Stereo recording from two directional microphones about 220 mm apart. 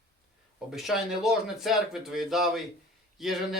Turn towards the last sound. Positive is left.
turn(degrees=0)  # may be behind; listen again after turning